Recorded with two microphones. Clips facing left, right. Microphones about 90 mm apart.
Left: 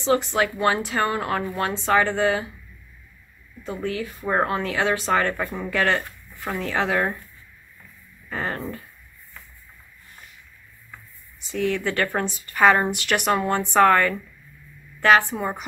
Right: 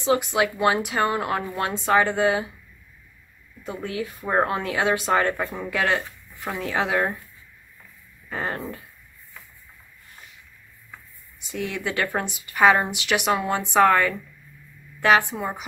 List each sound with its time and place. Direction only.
0.3 s speech: 15° right (ahead or behind)
3.6 s speech: 20° right (ahead or behind)
5.4 s speech: 10° right (ahead or behind)
8.3 s a sound: 20° right (ahead or behind)
11.5 s a woman's voice: 15° right (ahead or behind)
15.2 s speech: centre (ahead or behind)